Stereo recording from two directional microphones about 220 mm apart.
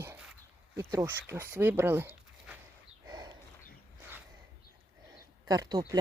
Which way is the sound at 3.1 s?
20° right (ahead or behind).